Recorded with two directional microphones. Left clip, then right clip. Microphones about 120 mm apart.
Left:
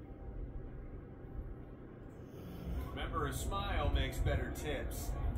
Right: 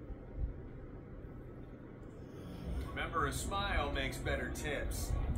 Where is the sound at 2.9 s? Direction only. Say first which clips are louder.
Right 4 dB; 35° right (ahead or behind).